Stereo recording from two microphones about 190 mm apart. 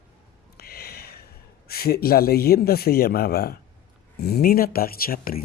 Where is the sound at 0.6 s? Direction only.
55° left (ahead or behind).